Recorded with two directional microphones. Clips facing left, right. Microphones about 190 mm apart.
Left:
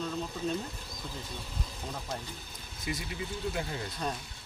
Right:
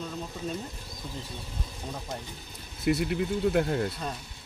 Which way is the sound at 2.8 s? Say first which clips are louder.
Right 11 dB; 65° right (ahead or behind).